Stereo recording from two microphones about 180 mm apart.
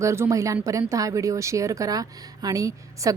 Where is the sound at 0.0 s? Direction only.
15° right (ahead or behind).